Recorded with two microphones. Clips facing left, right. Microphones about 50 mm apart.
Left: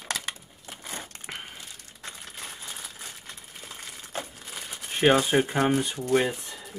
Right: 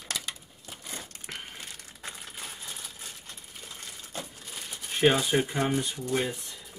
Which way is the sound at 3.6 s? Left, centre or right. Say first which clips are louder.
Left 2 dB; centre.